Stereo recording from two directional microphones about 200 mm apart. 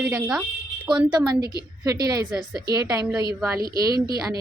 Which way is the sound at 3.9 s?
50° right (ahead or behind).